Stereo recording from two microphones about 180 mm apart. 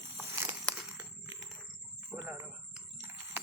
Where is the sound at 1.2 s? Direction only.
20° right (ahead or behind).